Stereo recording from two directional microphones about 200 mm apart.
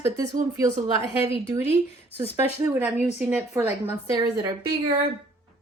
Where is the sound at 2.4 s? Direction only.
10° right (ahead or behind).